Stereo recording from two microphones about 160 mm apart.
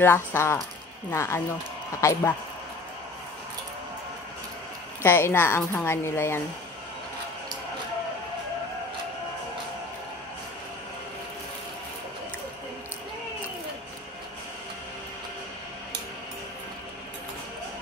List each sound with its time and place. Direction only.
0.0 s a woman's voice: 15° left (ahead or behind)
5.0 s a woman's voice: 15° left (ahead or behind)